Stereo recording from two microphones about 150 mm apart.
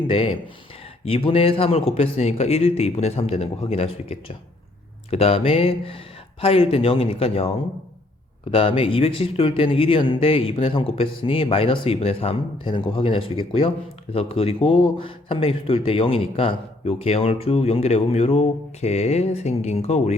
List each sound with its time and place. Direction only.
0.1 s speech: 35° left (ahead or behind)